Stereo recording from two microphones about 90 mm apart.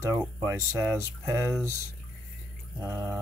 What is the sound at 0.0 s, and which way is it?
Speech, 30° right (ahead or behind).